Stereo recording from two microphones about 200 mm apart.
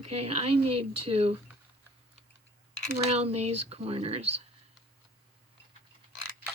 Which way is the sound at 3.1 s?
30° right (ahead or behind).